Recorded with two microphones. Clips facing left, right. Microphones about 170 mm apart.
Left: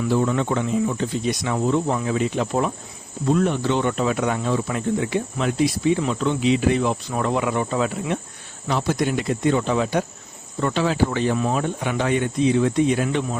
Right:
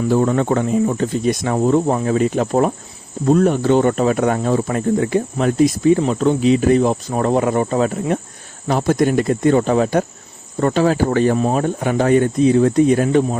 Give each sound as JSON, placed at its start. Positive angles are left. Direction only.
{"t": 0.0, "sound": "speech", "side_deg": -45}